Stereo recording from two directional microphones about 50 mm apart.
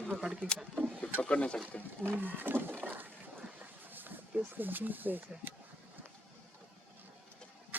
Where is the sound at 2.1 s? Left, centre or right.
Right.